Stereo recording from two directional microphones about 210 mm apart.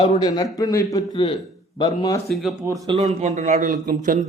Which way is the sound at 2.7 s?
15° right (ahead or behind).